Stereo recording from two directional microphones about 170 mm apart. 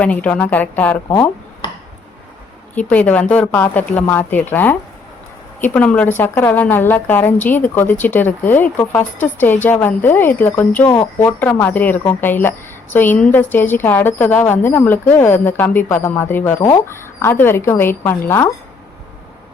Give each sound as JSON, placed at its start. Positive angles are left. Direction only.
{"t": 0.0, "sound": "a woman's voice", "side_deg": 10}
{"t": 1.0, "sound": "a sound", "side_deg": 25}
{"t": 2.9, "sound": "a woman's voice", "side_deg": 10}